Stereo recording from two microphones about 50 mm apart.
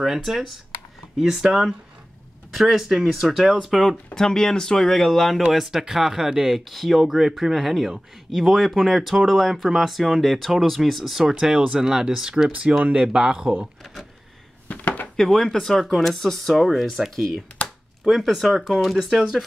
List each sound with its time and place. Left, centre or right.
0.0 s speech: centre
2.5 s speech: centre
4.1 s speech: centre; by 13.1 s right
13.1 s speech: centre
14.7 s a sound: left
15.1 s speech: centre